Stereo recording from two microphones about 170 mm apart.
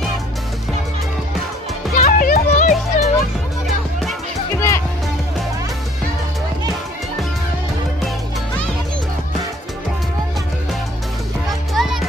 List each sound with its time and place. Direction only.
2.0 s music: 55° left (ahead or behind)
4.6 s music: 15° left (ahead or behind)
11.7 s music: centre (ahead or behind)